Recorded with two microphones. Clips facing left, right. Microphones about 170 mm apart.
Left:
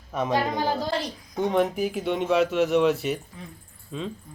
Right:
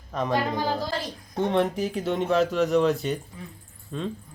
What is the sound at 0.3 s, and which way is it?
Speech, 20° left (ahead or behind).